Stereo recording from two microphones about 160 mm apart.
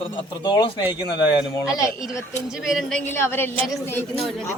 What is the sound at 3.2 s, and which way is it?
Speech, 15° left (ahead or behind).